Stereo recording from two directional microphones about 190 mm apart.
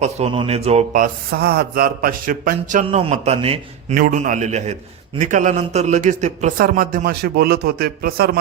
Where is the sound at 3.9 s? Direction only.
45° right (ahead or behind).